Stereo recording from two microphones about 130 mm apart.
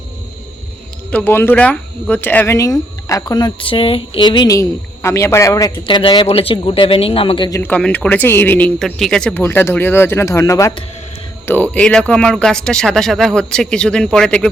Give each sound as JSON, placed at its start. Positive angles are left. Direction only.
{"t": 1.1, "sound": "speech", "side_deg": 15}
{"t": 4.5, "sound": "speech", "side_deg": 25}
{"t": 5.8, "sound": "speech", "side_deg": 40}
{"t": 7.5, "sound": "speech", "side_deg": 15}
{"t": 9.4, "sound": "speech", "side_deg": 15}
{"t": 11.7, "sound": "speech", "side_deg": 10}